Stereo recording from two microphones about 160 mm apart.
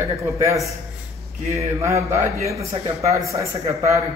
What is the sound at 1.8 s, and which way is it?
Speech, 20° right (ahead or behind).